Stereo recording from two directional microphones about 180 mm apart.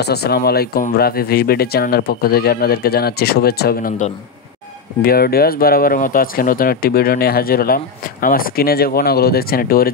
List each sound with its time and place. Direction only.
0.0 s speech: 65° left (ahead or behind)
5.0 s speech: 60° left (ahead or behind)